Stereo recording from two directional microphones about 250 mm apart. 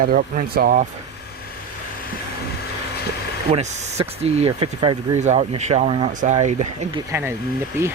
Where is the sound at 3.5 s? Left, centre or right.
Right.